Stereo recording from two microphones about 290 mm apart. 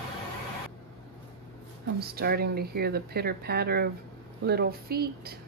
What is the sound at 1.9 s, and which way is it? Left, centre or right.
Speech, right.